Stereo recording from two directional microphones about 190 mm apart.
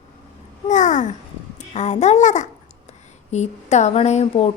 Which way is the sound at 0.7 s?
40° left (ahead or behind).